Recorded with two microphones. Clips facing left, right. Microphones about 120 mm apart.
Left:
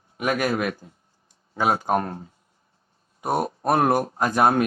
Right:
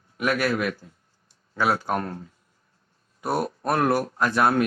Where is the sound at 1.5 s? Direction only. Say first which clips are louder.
Left 1 dB; 45° left (ahead or behind).